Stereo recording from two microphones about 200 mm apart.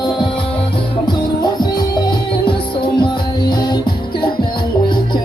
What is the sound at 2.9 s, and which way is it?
Music, 20° left (ahead or behind).